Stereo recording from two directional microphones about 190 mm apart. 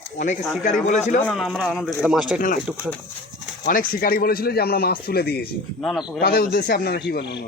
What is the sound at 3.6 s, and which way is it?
Speech, 50° left (ahead or behind).